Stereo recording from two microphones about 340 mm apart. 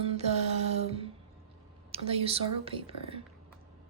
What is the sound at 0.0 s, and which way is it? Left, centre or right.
Music, centre.